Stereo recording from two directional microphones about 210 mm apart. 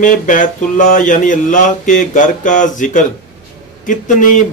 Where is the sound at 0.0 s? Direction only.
40° left (ahead or behind).